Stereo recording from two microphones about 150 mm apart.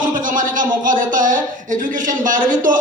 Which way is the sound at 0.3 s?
60° right (ahead or behind).